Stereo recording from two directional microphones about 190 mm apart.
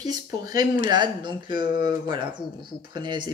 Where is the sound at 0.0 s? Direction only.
20° right (ahead or behind).